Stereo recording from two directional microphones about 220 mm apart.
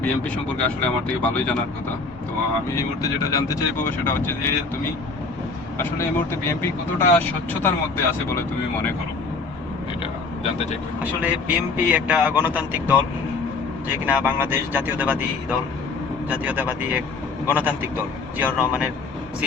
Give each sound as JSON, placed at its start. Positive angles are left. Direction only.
{"t": 0.0, "sound": "speech", "side_deg": 5}
{"t": 2.7, "sound": "speech", "side_deg": 15}
{"t": 5.7, "sound": "speech", "side_deg": 10}
{"t": 10.0, "sound": "vehicle", "side_deg": 30}
{"t": 11.0, "sound": "speech", "side_deg": -5}